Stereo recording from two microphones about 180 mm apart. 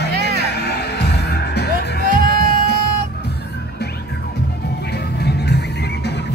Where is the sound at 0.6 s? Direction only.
65° left (ahead or behind).